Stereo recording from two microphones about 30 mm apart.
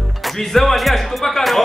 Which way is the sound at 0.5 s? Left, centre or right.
Centre.